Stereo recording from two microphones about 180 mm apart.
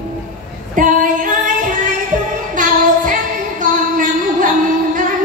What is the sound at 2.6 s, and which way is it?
Child singing, 45° right (ahead or behind).